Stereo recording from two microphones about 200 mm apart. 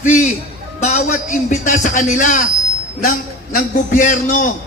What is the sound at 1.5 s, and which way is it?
Speech, 40° left (ahead or behind).